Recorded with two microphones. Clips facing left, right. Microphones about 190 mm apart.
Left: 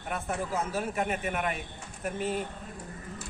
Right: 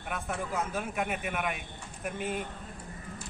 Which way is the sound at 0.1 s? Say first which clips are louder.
Left 2 dB; 5° left (ahead or behind).